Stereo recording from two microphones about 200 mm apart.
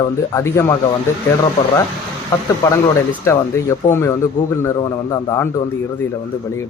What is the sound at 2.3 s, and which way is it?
Speech, 15° left (ahead or behind).